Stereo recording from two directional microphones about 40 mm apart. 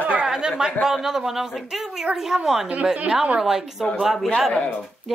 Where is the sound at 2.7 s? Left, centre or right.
Right.